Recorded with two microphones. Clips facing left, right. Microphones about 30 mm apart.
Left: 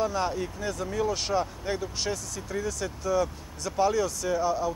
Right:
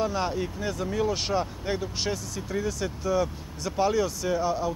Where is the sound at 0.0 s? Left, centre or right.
Centre.